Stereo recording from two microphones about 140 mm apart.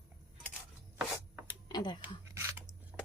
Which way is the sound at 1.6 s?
30° left (ahead or behind).